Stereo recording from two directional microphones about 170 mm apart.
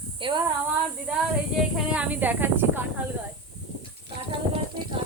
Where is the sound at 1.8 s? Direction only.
5° right (ahead or behind).